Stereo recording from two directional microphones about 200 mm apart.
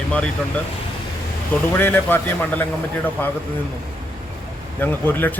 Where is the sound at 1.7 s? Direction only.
10° left (ahead or behind).